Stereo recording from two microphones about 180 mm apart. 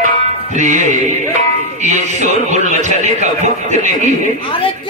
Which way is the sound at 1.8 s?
40° right (ahead or behind).